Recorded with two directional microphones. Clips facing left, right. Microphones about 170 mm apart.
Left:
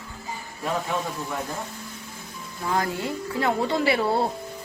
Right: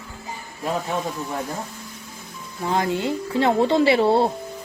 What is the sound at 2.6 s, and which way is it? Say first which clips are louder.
Speech: right 4 dB; 20° right (ahead or behind).